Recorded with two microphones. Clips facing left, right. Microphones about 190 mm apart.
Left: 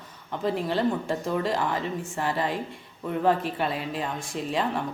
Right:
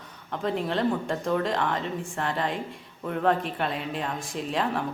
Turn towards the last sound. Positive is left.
turn(degrees=0)  # may be behind; listen again after turning